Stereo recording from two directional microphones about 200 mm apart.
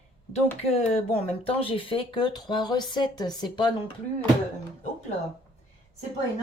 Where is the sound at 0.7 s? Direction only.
30° left (ahead or behind).